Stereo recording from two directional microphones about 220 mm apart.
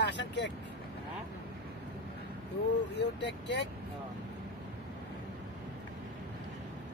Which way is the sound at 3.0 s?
50° left (ahead or behind).